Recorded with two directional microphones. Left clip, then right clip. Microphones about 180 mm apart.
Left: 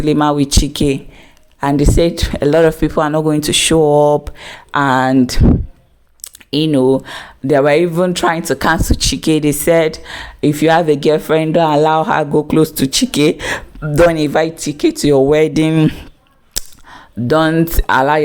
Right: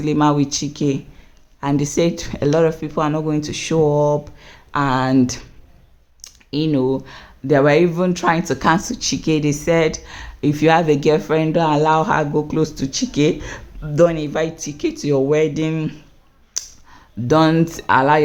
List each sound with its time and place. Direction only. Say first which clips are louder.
0.0 s speech: left 4 dB; 30° left (ahead or behind)
1.6 s speech: left 5 dB; 25° left (ahead or behind)
2.5 s speech: left 6 dB; 45° left (ahead or behind)
6.2 s speech: left 5 dB; 40° left (ahead or behind)
16.6 s a sound: left 3 dB; 35° left (ahead or behind)
17.2 s speech: left 2 dB; 25° left (ahead or behind)